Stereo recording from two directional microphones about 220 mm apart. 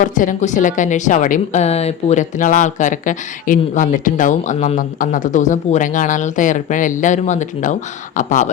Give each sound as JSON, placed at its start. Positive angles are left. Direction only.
{"t": 0.0, "sound": "a woman's voice", "side_deg": 35}